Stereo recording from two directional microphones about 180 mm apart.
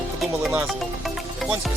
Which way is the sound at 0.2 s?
Centre (ahead or behind).